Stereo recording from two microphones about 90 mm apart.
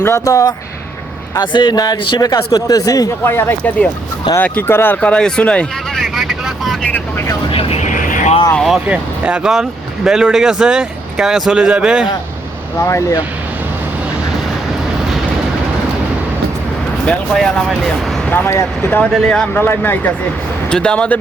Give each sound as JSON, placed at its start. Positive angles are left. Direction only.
{"t": 0.0, "sound": "speech", "side_deg": 35}
{"t": 1.4, "sound": "speech", "side_deg": 55}
{"t": 3.2, "sound": "speech", "side_deg": 25}
{"t": 6.0, "sound": "vehicle", "side_deg": 0}
{"t": 7.5, "sound": "speech", "side_deg": 90}
{"t": 8.9, "sound": "speech", "side_deg": -15}
{"t": 12.8, "sound": "speech", "side_deg": 35}
{"t": 17.3, "sound": "speech", "side_deg": 5}
{"t": 18.3, "sound": "speech", "side_deg": 25}
{"t": 18.9, "sound": "speech", "side_deg": 15}
{"t": 19.5, "sound": "speech", "side_deg": 20}
{"t": 20.7, "sound": "speech", "side_deg": 10}